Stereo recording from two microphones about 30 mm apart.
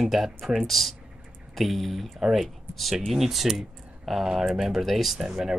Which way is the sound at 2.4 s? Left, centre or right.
Centre.